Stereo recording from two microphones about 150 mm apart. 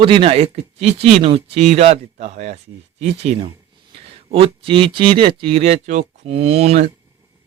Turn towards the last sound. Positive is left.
turn(degrees=-45)  # may be behind; listen again after turning